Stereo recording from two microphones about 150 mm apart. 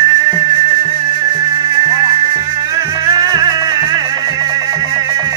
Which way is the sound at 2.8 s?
25° right (ahead or behind).